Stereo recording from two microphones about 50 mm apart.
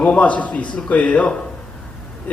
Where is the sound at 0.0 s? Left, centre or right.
Left.